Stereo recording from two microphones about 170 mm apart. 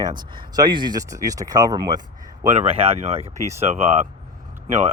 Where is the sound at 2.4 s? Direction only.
40° right (ahead or behind).